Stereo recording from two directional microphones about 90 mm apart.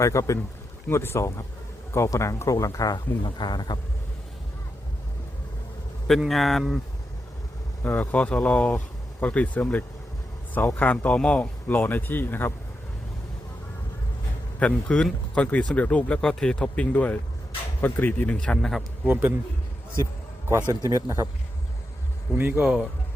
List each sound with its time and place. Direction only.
0.0 s speech: 35° left (ahead or behind)
3.2 s a man's voice: 55° left (ahead or behind)
6.1 s a man's voice: centre (ahead or behind)
7.9 s speech: 15° left (ahead or behind)
14.6 s speech: 10° left (ahead or behind)
19.0 s speech: 25° right (ahead or behind)
20.6 s speech: 30° left (ahead or behind)
20.9 s speech: 35° right (ahead or behind)
22.4 s speech: 20° right (ahead or behind)